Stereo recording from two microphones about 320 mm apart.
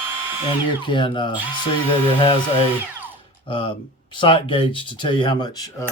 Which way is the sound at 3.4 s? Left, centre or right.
Centre.